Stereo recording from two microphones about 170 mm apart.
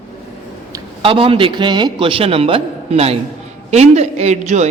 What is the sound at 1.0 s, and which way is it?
A man's voice, 30° right (ahead or behind).